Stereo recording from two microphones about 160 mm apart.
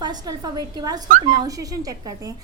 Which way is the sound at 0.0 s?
25° right (ahead or behind).